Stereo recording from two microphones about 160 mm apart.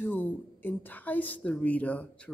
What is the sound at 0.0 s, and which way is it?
A man's voice, 10° left (ahead or behind).